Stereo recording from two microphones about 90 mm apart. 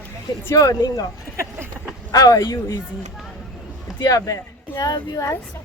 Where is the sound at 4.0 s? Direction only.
40° left (ahead or behind).